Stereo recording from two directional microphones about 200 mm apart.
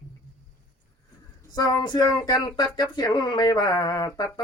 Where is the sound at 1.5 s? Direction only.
20° left (ahead or behind).